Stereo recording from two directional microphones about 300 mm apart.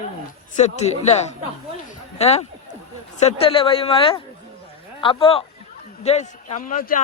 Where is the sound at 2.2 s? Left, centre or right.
Left.